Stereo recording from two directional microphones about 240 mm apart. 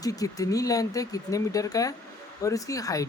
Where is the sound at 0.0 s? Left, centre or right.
Centre.